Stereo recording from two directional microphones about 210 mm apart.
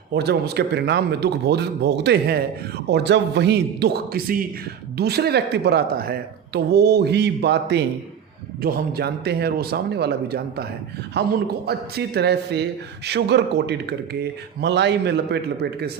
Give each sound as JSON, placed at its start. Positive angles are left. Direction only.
{"t": 0.1, "sound": "speech", "side_deg": -50}